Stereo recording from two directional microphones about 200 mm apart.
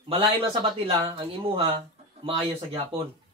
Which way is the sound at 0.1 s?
25° right (ahead or behind).